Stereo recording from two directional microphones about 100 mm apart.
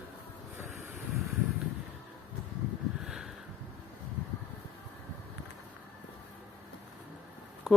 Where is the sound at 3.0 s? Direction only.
5° right (ahead or behind).